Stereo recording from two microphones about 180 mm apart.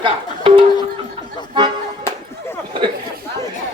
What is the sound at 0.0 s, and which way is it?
Music, 30° right (ahead or behind).